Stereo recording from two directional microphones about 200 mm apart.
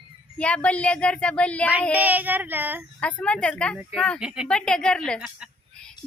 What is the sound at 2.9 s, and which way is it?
Speech, 5° left (ahead or behind).